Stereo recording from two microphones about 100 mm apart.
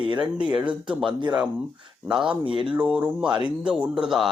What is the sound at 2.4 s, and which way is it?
Speech, 55° right (ahead or behind).